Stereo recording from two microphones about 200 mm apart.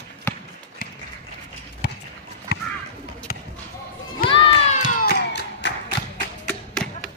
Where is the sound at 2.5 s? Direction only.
55° left (ahead or behind).